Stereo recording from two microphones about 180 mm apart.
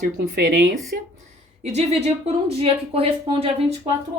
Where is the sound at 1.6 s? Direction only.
35° right (ahead or behind).